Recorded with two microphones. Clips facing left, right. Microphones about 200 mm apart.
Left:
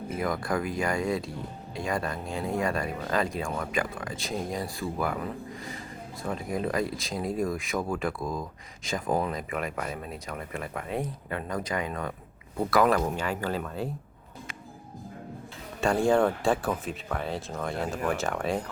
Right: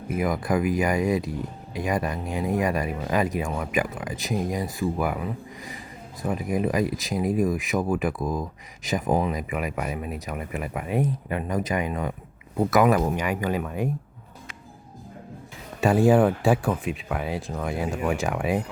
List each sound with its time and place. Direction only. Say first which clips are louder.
0.1 s speech: right 5 dB; 15° right (ahead or behind)
16.0 s speech: right 4 dB; 15° right (ahead or behind)
16.4 s speech: right 4 dB; centre (ahead or behind)